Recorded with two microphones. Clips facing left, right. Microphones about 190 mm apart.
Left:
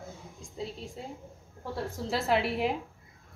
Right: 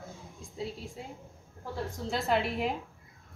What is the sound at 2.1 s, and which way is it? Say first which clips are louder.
Speech: left 2 dB; centre (ahead or behind).